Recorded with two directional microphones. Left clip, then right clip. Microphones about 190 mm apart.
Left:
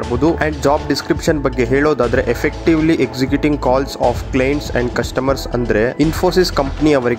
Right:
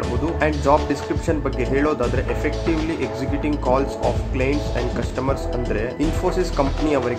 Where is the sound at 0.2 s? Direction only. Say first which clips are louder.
Left 5 dB; 40° left (ahead or behind).